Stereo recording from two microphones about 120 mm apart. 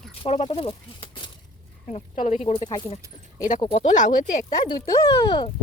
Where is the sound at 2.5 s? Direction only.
45° left (ahead or behind).